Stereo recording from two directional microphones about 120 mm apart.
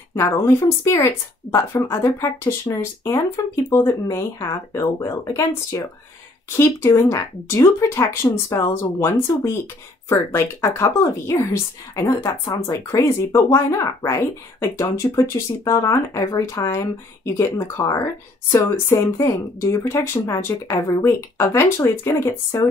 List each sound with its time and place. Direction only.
0.1 s speech: 20° left (ahead or behind)
10.0 s speech: 25° left (ahead or behind)